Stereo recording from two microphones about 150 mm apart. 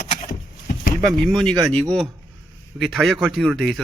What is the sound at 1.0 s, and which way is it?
A man's voice, centre (ahead or behind).